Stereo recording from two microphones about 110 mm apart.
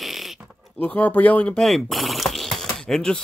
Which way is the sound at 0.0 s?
Centre (ahead or behind).